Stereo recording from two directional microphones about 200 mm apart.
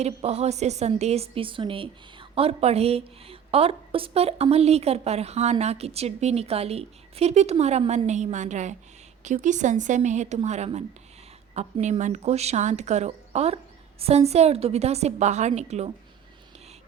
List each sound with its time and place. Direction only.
0.0 s a woman's voice: 30° right (ahead or behind)